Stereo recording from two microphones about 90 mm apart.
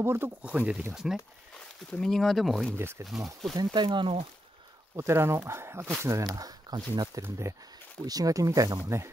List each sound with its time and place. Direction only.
0.0 s speech: 30° right (ahead or behind)
0.4 s speech: 15° right (ahead or behind)
0.9 s speech: 5° right (ahead or behind)
2.8 s speech: 25° right (ahead or behind)
3.5 s speech: 60° right (ahead or behind)
4.9 s speech: 30° right (ahead or behind); by 7.1 s 45° right (ahead or behind)
7.2 s speech: 35° right (ahead or behind)
8.0 s speech: 45° right (ahead or behind)